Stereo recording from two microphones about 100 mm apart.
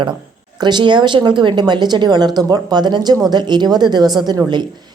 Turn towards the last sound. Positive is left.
turn(degrees=-45)  # may be behind; listen again after turning